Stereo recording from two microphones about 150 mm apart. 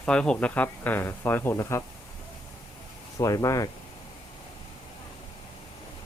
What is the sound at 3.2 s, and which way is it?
Speech, 25° left (ahead or behind).